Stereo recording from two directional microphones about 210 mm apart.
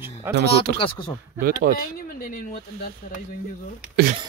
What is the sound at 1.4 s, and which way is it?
Speech, 40° right (ahead or behind).